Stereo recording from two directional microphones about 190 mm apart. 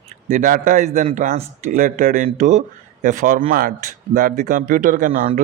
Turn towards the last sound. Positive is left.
turn(degrees=-45)  # may be behind; listen again after turning